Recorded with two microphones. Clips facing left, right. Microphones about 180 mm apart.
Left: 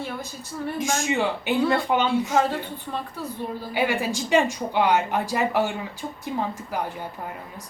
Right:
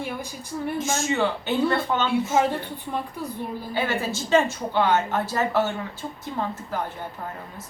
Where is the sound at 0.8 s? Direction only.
15° left (ahead or behind).